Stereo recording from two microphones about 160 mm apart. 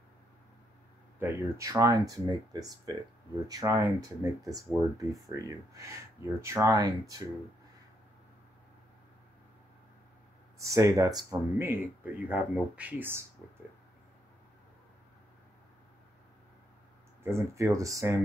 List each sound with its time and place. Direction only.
1.2 s speech: 20° right (ahead or behind)
10.6 s speech: 20° right (ahead or behind)
17.2 s speech: 15° right (ahead or behind)